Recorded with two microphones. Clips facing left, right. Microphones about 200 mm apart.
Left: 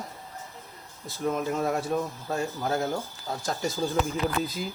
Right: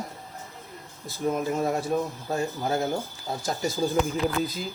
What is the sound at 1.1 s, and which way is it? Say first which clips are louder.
Speech: right 1 dB; 5° right (ahead or behind).